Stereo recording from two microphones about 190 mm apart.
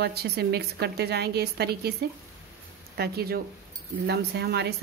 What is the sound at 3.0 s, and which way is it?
A woman's voice, 55° right (ahead or behind).